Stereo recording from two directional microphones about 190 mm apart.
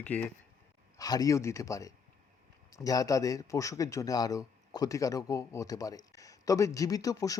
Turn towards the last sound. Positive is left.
turn(degrees=20)  # may be behind; listen again after turning